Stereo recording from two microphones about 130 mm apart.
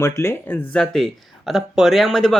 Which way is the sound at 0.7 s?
5° left (ahead or behind).